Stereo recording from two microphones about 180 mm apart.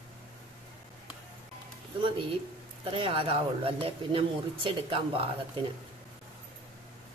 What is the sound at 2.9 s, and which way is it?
Speech, 30° right (ahead or behind).